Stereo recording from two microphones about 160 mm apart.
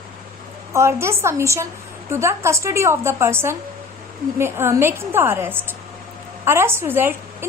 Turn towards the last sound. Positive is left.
turn(degrees=-15)  # may be behind; listen again after turning